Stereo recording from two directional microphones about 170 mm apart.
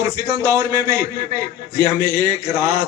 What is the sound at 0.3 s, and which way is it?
A man's voice, 20° right (ahead or behind).